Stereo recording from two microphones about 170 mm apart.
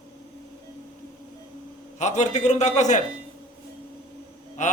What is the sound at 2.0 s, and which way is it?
A man's voice, 45° left (ahead or behind).